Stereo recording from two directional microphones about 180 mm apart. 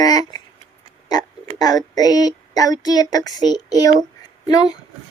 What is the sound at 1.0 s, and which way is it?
Speech, 20° left (ahead or behind).